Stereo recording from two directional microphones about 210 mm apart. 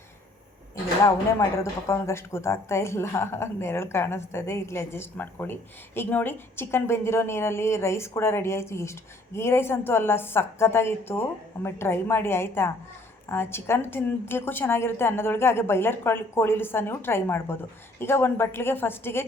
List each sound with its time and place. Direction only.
1.0 s a woman's voice: 15° left (ahead or behind)